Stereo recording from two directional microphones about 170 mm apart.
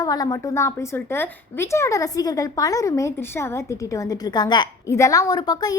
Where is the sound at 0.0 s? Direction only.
20° left (ahead or behind).